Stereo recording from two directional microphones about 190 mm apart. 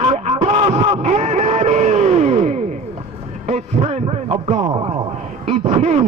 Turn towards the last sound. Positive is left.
turn(degrees=-35)  # may be behind; listen again after turning